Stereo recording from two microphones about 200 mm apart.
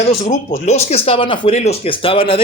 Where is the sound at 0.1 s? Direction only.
35° left (ahead or behind).